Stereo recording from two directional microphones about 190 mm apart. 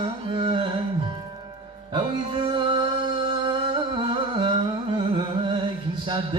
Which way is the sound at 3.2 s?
25° right (ahead or behind).